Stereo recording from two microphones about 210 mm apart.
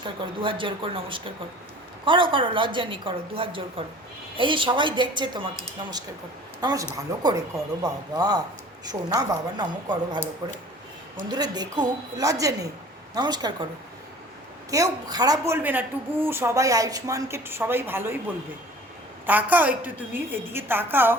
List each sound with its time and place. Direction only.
0.0 s a woman's voice: 25° right (ahead or behind)
6.6 s a woman's voice: 20° right (ahead or behind)
11.3 s a woman's voice: 20° right (ahead or behind)
14.7 s a woman's voice: 15° right (ahead or behind)
19.2 s a woman's voice: 10° right (ahead or behind)